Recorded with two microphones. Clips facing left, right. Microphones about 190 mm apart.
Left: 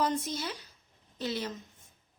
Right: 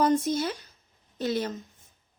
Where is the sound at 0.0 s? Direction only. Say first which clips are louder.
Right 7 dB; 45° right (ahead or behind).